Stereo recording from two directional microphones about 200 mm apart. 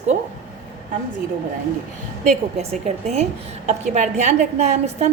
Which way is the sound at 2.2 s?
35° right (ahead or behind).